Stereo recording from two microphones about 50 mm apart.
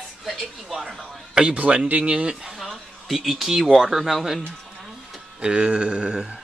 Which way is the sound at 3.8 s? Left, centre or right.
Centre.